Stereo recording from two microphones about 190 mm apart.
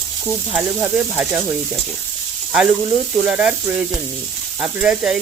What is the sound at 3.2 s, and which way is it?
Frying, 5° right (ahead or behind).